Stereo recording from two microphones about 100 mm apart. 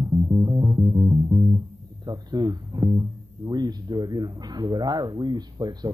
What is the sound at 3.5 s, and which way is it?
Speech, 40° right (ahead or behind).